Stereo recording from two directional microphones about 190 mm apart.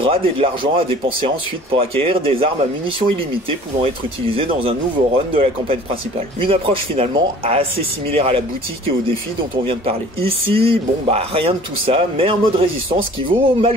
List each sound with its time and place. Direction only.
0.0 s speech: 30° right (ahead or behind)
9.7 s speech: 30° right (ahead or behind)